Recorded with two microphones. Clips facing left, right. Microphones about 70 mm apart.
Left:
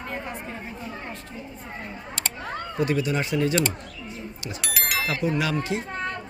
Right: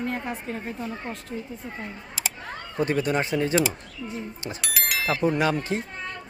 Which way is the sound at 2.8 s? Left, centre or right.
Right.